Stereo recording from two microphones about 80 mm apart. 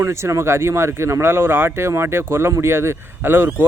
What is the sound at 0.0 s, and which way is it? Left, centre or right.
Speech, right.